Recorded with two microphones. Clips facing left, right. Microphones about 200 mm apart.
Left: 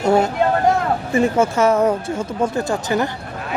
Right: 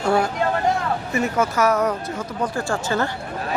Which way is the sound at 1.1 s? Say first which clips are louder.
Left 5 dB; 25° left (ahead or behind).